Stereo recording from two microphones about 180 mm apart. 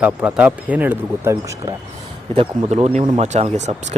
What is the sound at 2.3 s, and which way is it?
Speech, 35° right (ahead or behind).